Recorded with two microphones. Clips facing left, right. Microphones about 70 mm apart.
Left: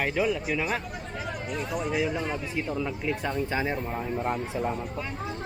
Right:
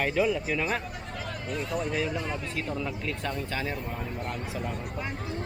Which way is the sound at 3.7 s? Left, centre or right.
Left.